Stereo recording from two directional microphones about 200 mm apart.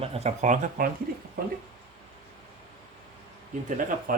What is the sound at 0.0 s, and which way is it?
Speech, 30° right (ahead or behind).